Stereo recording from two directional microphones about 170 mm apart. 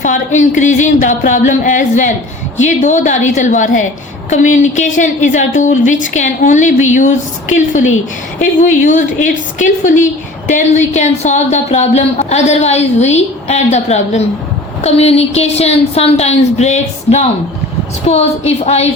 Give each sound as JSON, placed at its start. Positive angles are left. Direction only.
{"t": 0.0, "sound": "a woman's voice", "side_deg": 45}